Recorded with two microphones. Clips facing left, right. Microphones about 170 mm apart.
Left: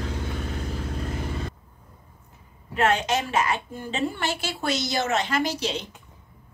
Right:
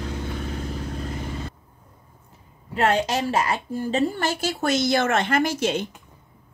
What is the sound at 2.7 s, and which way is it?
A woman's voice, 35° right (ahead or behind).